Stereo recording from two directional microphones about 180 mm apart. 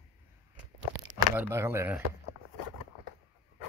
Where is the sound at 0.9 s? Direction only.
90° right.